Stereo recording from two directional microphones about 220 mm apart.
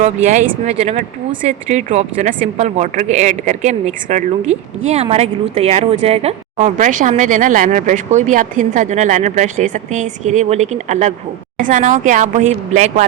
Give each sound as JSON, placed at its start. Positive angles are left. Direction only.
{"t": 0.0, "sound": "a woman's voice", "side_deg": -35}